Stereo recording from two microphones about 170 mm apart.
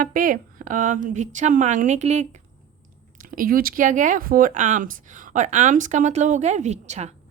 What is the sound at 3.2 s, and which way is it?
A woman's voice, 55° right (ahead or behind).